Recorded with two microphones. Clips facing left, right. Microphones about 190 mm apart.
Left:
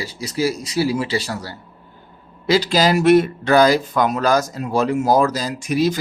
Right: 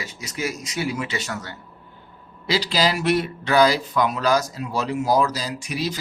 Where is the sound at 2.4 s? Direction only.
50° left (ahead or behind).